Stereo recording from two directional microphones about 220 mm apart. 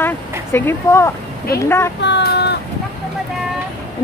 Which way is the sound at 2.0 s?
50° left (ahead or behind).